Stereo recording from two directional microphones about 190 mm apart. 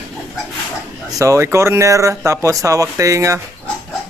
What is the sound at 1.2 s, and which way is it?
A man's voice, 15° right (ahead or behind).